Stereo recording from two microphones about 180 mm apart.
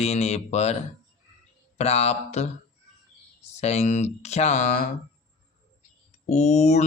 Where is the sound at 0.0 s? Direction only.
35° left (ahead or behind).